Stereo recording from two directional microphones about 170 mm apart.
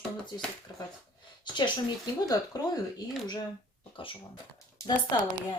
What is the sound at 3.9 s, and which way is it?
Speech, 30° left (ahead or behind).